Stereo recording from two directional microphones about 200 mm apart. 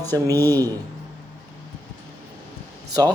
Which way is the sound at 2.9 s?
20° right (ahead or behind).